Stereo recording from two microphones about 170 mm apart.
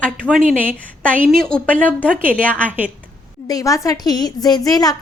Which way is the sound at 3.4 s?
20° left (ahead or behind).